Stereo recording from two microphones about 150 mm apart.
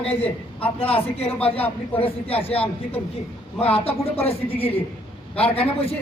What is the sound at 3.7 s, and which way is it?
Speech, 40° left (ahead or behind).